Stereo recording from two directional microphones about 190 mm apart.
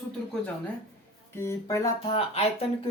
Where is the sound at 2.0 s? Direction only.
30° left (ahead or behind).